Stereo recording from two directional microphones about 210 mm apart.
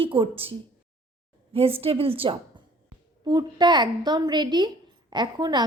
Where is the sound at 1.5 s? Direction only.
25° right (ahead or behind).